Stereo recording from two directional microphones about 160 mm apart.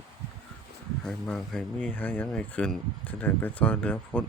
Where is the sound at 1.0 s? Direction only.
5° left (ahead or behind).